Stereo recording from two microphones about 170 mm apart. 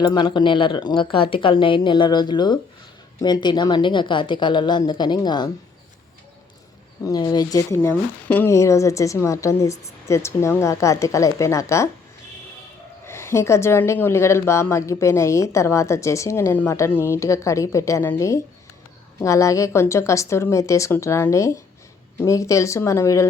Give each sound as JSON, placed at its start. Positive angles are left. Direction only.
{"t": 0.0, "sound": "speech", "side_deg": 25}
{"t": 7.0, "sound": "a woman's voice", "side_deg": 20}
{"t": 13.1, "sound": "a woman's voice", "side_deg": 15}